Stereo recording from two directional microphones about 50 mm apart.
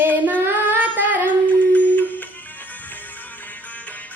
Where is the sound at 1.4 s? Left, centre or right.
Left.